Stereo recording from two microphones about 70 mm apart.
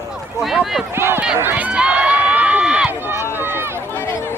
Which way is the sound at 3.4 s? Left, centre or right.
Right.